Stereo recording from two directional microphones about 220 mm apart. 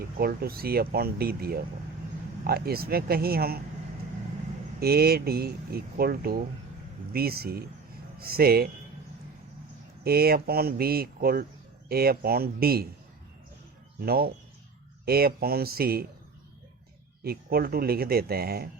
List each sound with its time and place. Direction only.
0.0 s speech: 45° right (ahead or behind)
4.8 s speech: 45° right (ahead or behind)
10.0 s speech: 45° right (ahead or behind)
14.0 s speech: 45° right (ahead or behind)
17.2 s speech: 45° right (ahead or behind)